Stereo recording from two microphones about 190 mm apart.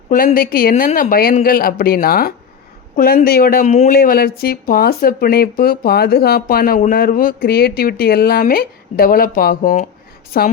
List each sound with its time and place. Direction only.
0.1 s speech: 45° left (ahead or behind)
0.9 s speech: 35° left (ahead or behind)
1.1 s speech: 50° left (ahead or behind)